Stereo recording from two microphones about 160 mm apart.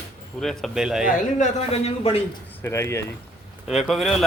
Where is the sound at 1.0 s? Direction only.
55° left (ahead or behind).